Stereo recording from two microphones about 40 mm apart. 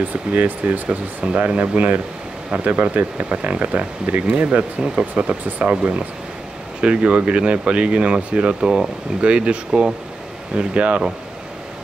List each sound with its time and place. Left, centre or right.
0.3 s speech: right